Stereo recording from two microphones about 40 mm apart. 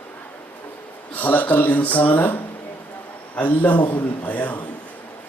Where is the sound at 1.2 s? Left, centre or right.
Left.